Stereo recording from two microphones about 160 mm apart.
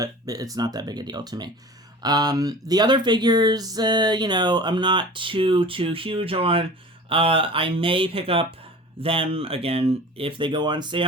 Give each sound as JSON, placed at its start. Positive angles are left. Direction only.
{"t": 0.0, "sound": "speech", "side_deg": -20}